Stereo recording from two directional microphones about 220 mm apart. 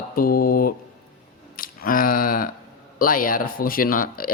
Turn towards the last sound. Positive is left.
turn(degrees=40)  # may be behind; listen again after turning